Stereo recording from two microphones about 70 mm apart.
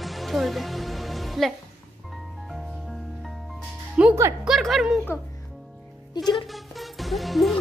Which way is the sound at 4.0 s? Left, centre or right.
Centre.